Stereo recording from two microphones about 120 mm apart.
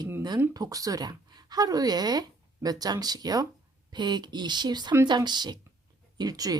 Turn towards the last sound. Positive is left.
turn(degrees=-30)  # may be behind; listen again after turning